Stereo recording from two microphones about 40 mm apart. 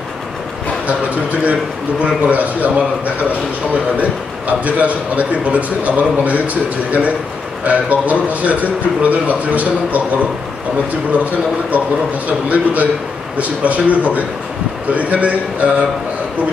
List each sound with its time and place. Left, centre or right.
0.8 s a man's voice: right
4.5 s a man's voice: right
12.3 s a man's voice: right